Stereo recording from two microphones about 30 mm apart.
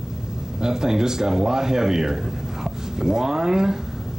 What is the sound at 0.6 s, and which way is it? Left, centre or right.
Speech, right.